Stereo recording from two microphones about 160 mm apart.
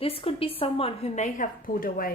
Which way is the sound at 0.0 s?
35° left (ahead or behind).